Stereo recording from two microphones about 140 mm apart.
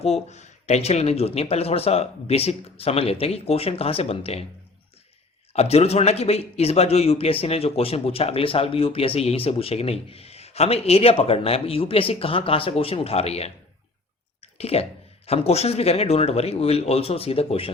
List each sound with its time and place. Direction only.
0.0 s a man's voice: 50° left (ahead or behind)
5.5 s a man's voice: 50° left (ahead or behind)
14.4 s clicking: 45° left (ahead or behind)
15.3 s a man's voice: 45° left (ahead or behind)